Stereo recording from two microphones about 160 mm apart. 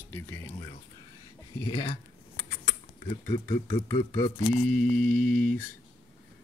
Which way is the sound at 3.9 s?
25° left (ahead or behind).